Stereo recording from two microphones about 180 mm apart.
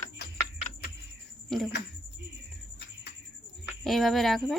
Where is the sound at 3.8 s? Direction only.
Centre (ahead or behind).